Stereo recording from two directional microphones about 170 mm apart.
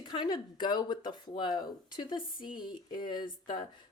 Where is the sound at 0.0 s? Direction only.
25° left (ahead or behind).